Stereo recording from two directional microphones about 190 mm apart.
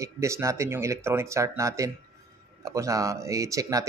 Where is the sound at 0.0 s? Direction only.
15° right (ahead or behind).